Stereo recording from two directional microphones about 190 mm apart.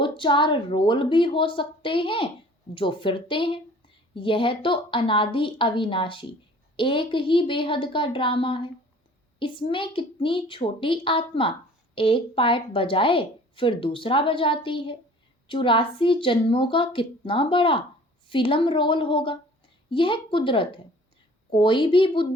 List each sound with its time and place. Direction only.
0.0 s a woman's voice: 25° left (ahead or behind)